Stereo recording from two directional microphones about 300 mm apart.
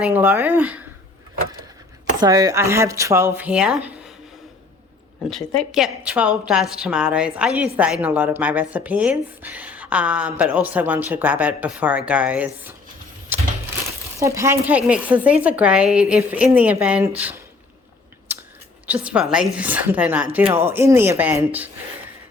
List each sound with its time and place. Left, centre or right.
0.0 s speech: centre
2.2 s speech: centre
5.3 s speech: centre
14.2 s speech: centre
18.3 s a sound: centre
18.9 s speech: centre